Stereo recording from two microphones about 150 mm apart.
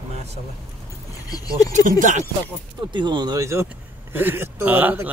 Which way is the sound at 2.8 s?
30° right (ahead or behind).